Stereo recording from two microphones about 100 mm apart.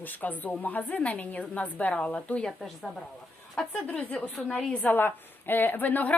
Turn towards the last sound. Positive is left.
turn(degrees=20)  # may be behind; listen again after turning